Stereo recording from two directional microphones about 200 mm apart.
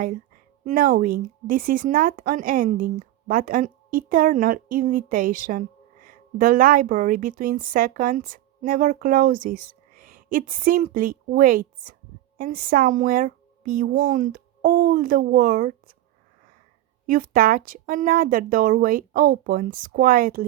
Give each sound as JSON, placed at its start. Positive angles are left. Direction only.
{"t": 0.6, "sound": "a woman's voice", "side_deg": -40}
{"t": 17.1, "sound": "speech", "side_deg": -45}